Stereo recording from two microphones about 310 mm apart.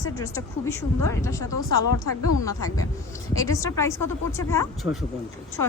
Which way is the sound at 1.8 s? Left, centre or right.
Left.